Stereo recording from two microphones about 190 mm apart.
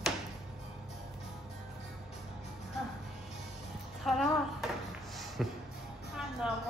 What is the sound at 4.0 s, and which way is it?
Music, centre (ahead or behind).